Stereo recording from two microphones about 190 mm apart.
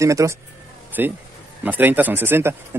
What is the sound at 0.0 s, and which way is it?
Speech, 15° right (ahead or behind).